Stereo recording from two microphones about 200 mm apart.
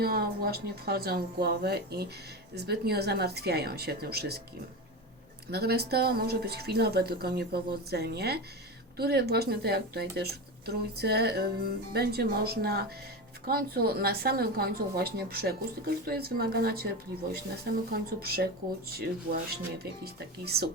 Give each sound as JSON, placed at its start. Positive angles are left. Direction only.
{"t": 0.0, "sound": "speech", "side_deg": -50}
{"t": 5.5, "sound": "speech", "side_deg": -50}
{"t": 17.9, "sound": "speech", "side_deg": -50}
{"t": 20.4, "sound": "speech", "side_deg": -50}